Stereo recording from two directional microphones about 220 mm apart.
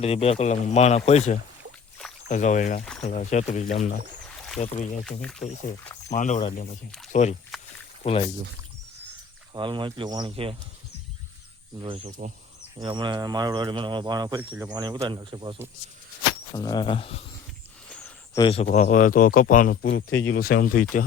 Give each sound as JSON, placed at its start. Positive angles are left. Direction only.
{"t": 0.0, "sound": "speech", "side_deg": 30}
{"t": 5.2, "sound": "speech", "side_deg": 5}
{"t": 6.1, "sound": "speech", "side_deg": 35}
{"t": 9.5, "sound": "speech", "side_deg": -20}
{"t": 11.8, "sound": "speech", "side_deg": -25}
{"t": 16.6, "sound": "speech", "side_deg": 20}
{"t": 17.8, "sound": "a sound", "side_deg": 5}
{"t": 18.3, "sound": "speech", "side_deg": 25}
{"t": 20.1, "sound": "speech", "side_deg": 60}
{"t": 20.3, "sound": "speech", "side_deg": 40}